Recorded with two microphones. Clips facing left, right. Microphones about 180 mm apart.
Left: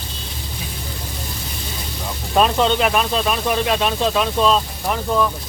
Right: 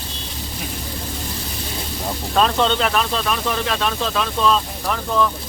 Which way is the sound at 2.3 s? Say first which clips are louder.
Left 2 dB; 10° left (ahead or behind).